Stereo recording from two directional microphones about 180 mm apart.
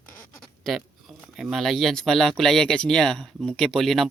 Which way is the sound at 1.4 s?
Centre (ahead or behind).